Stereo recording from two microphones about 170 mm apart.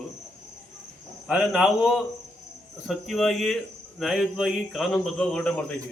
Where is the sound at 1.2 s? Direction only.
5° right (ahead or behind).